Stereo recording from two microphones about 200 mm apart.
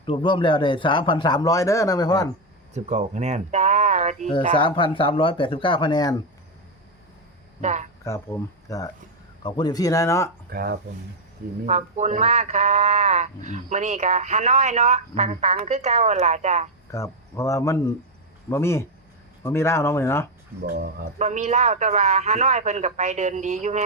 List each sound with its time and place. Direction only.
0.0 s a man's voice: 25° left (ahead or behind)
2.7 s speech: 35° right (ahead or behind)
4.5 s a man's voice: 25° left (ahead or behind)
7.6 s speech: 35° right (ahead or behind)
8.0 s speech: 15° left (ahead or behind)
10.5 s speech: 50° right (ahead or behind)
11.6 s speech: 35° right (ahead or behind)
16.9 s speech: 15° left (ahead or behind)
20.7 s speech: 40° right (ahead or behind)